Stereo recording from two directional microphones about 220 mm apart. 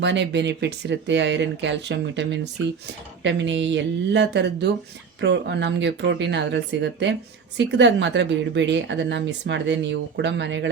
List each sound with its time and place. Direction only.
0.0 s speech: 55° right (ahead or behind)